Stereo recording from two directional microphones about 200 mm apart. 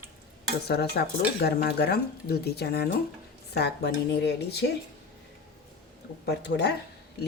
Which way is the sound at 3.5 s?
55° left (ahead or behind).